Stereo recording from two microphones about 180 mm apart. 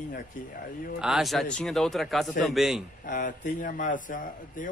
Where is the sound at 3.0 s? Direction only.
45° left (ahead or behind).